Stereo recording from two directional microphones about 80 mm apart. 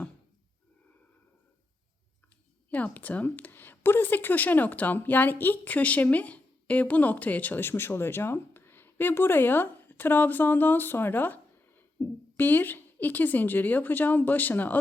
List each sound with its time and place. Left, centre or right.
2.6 s a woman's voice: centre